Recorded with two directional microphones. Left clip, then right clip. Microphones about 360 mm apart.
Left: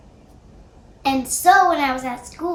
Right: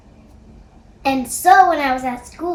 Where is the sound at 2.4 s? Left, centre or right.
Centre.